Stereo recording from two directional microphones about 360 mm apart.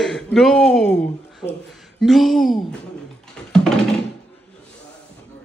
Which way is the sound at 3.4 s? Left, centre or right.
Centre.